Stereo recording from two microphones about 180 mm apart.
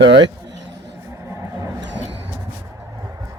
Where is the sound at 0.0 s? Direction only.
80° right.